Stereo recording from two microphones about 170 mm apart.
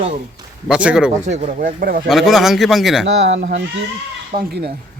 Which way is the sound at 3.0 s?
90° right.